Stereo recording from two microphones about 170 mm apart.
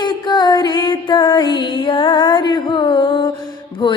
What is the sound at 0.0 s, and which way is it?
Music, 25° left (ahead or behind).